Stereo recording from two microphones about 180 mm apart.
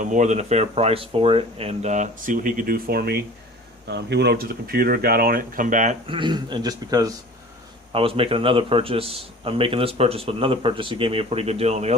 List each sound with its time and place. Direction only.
0.0 s a man's voice: 40° right (ahead or behind)
6.1 s a man's voice: 25° right (ahead or behind)
7.9 s a man's voice: 30° right (ahead or behind)